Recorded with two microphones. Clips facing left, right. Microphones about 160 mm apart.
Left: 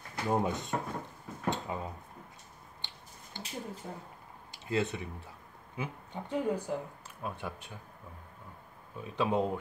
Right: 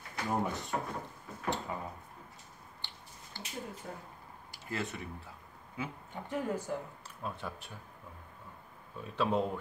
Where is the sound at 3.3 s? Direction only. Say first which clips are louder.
Left 3 dB; 20° left (ahead or behind).